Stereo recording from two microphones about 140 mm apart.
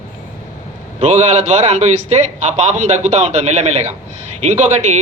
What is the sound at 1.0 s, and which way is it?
Speech, 50° right (ahead or behind).